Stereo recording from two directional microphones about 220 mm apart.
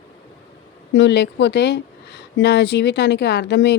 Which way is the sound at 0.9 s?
55° left (ahead or behind).